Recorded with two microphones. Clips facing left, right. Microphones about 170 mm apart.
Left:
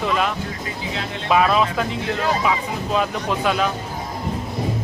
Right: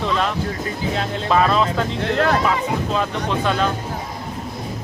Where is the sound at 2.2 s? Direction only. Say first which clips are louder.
Right 5 dB; 65° right (ahead or behind).